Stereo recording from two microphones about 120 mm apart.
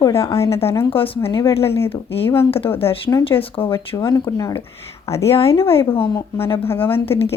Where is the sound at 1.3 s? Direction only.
25° left (ahead or behind).